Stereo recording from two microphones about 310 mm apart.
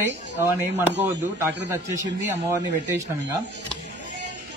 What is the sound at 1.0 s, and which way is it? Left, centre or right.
Speech, centre.